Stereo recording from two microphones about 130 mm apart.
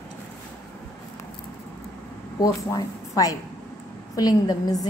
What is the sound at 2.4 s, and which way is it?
A woman's voice, 25° left (ahead or behind).